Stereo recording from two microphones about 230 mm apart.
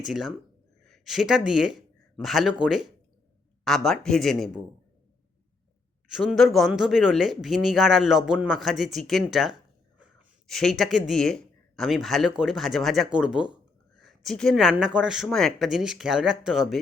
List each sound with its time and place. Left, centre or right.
0.0 s speech: centre
6.1 s speech: centre